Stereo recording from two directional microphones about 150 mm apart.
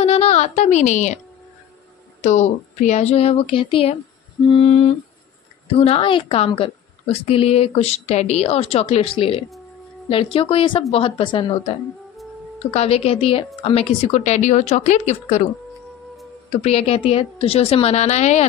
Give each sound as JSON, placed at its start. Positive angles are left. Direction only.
{"t": 0.0, "sound": "a sound", "side_deg": 45}
{"t": 2.2, "sound": "a woman's voice", "side_deg": 50}
{"t": 4.5, "sound": "a sound", "side_deg": 35}
{"t": 5.8, "sound": "a woman's voice", "side_deg": 40}
{"t": 12.7, "sound": "a woman's voice", "side_deg": 40}
{"t": 16.6, "sound": "a woman's voice", "side_deg": 40}